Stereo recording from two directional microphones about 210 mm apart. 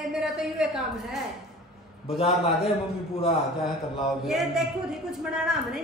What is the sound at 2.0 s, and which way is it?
Speech, 25° left (ahead or behind).